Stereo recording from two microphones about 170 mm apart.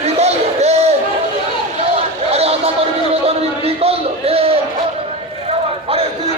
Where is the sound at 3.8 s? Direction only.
35° right (ahead or behind).